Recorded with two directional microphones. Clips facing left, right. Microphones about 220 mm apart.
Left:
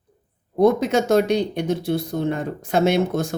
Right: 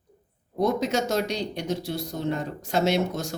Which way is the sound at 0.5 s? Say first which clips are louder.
Left 7 dB; 55° left (ahead or behind).